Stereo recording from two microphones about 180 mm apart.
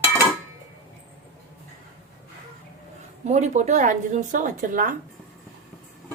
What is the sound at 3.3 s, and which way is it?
Speech, 40° right (ahead or behind).